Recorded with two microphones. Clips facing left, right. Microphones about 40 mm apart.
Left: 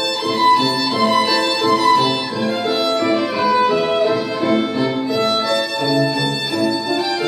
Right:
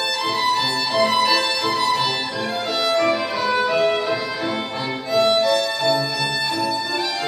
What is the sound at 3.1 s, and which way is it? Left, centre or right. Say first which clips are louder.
Violin: left 3 dB; centre.